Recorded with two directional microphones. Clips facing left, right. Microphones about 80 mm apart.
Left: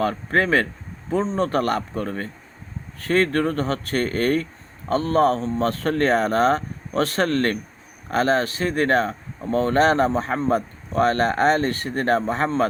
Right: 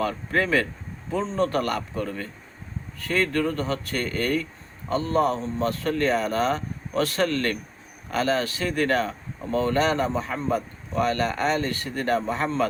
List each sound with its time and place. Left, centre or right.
0.0 s a man's voice: left